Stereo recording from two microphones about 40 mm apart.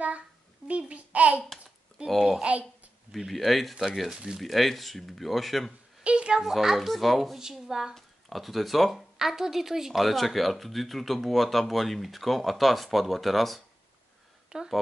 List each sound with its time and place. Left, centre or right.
0.7 s a child's voice: right
2.0 s speech: centre
4.1 s speech: centre
4.4 s speech: centre
6.0 s a sound: right
6.4 s speech: centre
7.3 s speech: centre
10.0 s speech: centre
14.5 s speech: right